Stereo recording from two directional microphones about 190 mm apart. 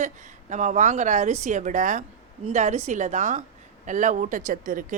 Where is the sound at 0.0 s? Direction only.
40° right (ahead or behind).